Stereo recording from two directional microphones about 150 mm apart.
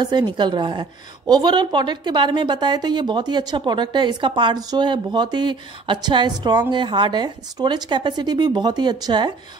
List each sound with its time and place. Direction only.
0.0 s a woman's voice: 30° right (ahead or behind)